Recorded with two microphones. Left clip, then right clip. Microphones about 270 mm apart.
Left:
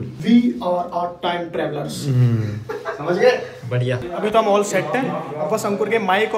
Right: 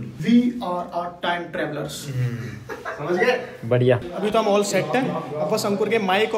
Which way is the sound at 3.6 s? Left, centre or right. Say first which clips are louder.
Right 5 dB; centre.